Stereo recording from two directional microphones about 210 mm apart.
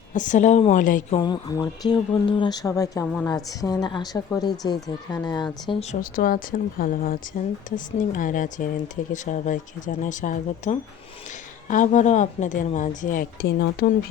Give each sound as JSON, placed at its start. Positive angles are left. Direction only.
{"t": 0.1, "sound": "a woman's voice", "side_deg": 35}
{"t": 1.2, "sound": "a woman's voice", "side_deg": 20}
{"t": 5.9, "sound": "a woman's voice", "side_deg": 40}